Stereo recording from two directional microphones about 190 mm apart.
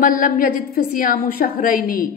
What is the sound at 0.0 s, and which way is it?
A woman's voice, 50° left (ahead or behind).